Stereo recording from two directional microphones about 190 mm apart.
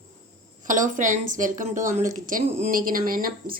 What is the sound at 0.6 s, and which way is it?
Speech, 45° right (ahead or behind).